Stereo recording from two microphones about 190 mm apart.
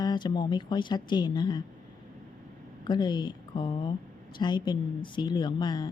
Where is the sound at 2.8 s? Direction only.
25° left (ahead or behind).